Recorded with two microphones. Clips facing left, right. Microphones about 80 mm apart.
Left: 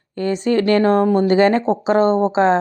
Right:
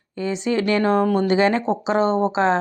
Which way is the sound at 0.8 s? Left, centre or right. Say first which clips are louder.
Left 4 dB; left.